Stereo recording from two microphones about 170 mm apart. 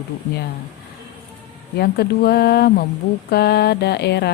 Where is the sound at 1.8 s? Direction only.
70° left (ahead or behind).